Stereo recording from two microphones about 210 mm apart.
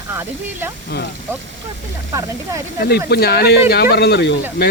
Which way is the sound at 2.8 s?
50° left (ahead or behind).